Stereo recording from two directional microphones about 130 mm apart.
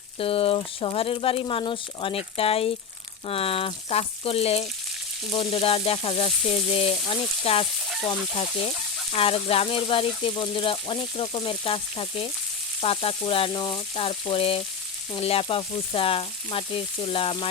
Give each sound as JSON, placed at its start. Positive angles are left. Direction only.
{"t": 0.2, "sound": "speech", "side_deg": 45}
{"t": 9.1, "sound": "speech", "side_deg": 45}